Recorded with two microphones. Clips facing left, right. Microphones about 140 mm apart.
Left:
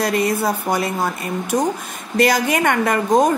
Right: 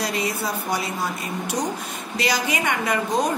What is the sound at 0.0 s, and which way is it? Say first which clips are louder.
A woman's voice: left 7 dB; 55° left (ahead or behind).